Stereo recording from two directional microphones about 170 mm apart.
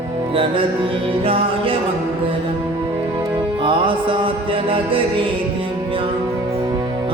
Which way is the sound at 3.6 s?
30° right (ahead or behind).